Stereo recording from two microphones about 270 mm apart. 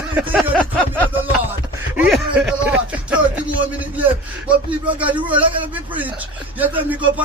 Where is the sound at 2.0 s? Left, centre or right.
Centre.